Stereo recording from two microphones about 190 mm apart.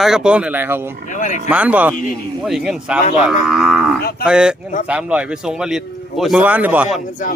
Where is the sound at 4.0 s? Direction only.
55° left (ahead or behind).